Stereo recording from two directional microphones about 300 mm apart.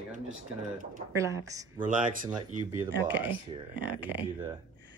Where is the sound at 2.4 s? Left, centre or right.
Right.